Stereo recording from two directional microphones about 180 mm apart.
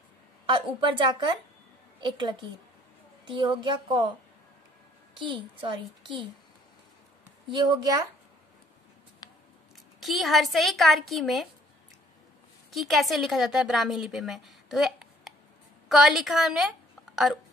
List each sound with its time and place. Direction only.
0.5 s a woman's voice: 25° right (ahead or behind)
5.3 s a woman's voice: 25° right (ahead or behind)
7.5 s a woman's voice: 25° right (ahead or behind)
9.2 s scissors: 20° left (ahead or behind)
9.9 s speech: centre (ahead or behind)
12.7 s a woman's voice: centre (ahead or behind)